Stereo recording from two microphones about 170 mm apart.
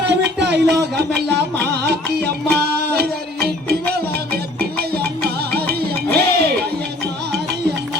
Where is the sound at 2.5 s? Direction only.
75° right (ahead or behind).